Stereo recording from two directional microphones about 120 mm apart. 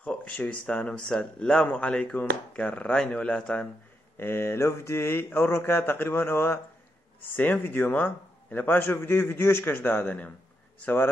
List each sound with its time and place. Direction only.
0.0 s a man's voice: 10° left (ahead or behind)
4.2 s a man's voice: 20° left (ahead or behind)